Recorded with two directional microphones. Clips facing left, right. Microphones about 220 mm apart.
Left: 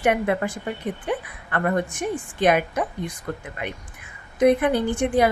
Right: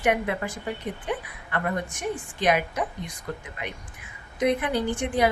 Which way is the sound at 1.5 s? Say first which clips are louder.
Left 5 dB; 55° left (ahead or behind).